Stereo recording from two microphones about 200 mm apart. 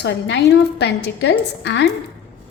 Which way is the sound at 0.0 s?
60° left (ahead or behind).